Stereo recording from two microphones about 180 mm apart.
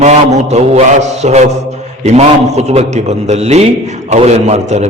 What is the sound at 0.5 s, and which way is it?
A man's voice, 40° right (ahead or behind).